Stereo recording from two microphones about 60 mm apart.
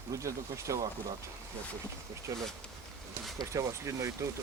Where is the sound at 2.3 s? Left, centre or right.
Right.